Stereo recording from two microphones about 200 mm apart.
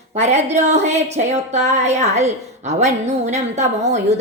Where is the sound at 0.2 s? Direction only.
35° right (ahead or behind).